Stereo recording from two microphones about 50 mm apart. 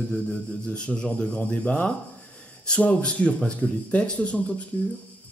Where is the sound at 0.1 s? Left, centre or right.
Left.